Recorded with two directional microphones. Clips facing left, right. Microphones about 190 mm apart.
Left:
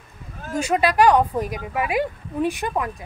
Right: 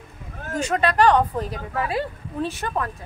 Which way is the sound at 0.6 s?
10° left (ahead or behind).